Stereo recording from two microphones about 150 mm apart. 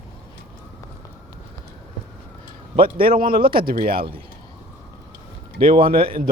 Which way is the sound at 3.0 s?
75° right (ahead or behind).